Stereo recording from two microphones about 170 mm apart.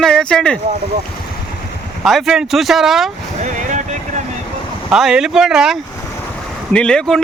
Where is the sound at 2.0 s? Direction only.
Centre (ahead or behind).